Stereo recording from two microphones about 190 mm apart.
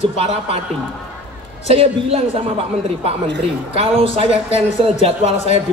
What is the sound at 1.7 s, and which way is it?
Speech, 30° right (ahead or behind).